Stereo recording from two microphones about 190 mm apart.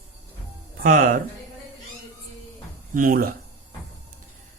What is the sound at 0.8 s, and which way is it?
Speech, 45° right (ahead or behind).